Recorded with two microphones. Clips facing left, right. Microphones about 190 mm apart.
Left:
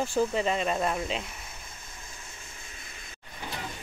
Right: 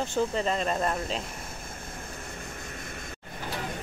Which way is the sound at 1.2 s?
50° right (ahead or behind).